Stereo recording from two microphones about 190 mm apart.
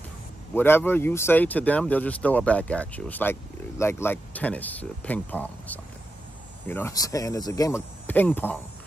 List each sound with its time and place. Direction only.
0.6 s speech: 10° left (ahead or behind)